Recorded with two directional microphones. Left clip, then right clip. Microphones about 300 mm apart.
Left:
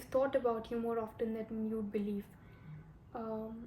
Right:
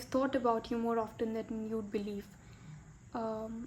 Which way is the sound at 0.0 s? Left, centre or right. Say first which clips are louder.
Even; right.